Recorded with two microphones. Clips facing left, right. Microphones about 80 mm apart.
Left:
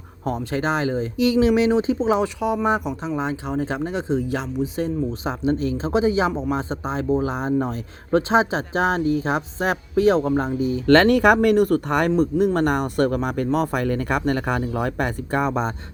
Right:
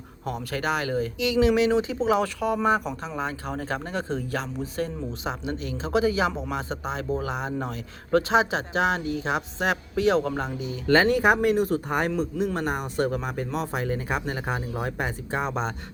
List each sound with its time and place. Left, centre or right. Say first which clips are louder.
0.5 s speech: left 3 dB; left
5.2 s speech: left 8 dB; left
10.8 s speech: left 5 dB; left